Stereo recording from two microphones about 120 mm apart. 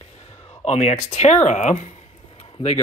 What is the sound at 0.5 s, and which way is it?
Speech, 65° left (ahead or behind).